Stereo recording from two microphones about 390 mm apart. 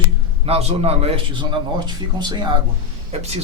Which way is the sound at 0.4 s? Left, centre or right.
Centre.